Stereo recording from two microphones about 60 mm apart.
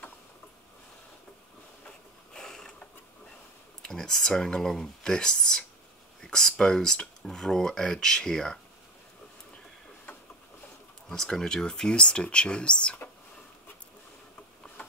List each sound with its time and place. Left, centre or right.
1.9 s mechanisms: centre
3.8 s speech: centre
6.2 s a sound: centre
6.5 s speech: centre
11.1 s speech: centre
14.8 s a sound: left